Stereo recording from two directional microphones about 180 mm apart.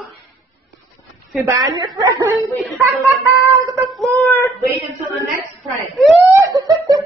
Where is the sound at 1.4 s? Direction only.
20° right (ahead or behind).